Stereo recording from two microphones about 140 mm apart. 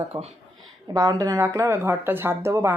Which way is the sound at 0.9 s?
25° right (ahead or behind).